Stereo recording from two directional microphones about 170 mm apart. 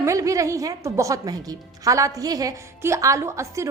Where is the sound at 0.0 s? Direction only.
20° right (ahead or behind).